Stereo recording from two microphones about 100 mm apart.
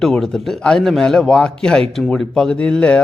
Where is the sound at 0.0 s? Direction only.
Centre (ahead or behind).